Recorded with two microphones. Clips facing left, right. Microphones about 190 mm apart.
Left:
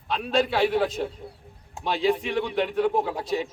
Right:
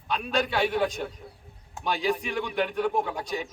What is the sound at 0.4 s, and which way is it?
Speech, centre (ahead or behind).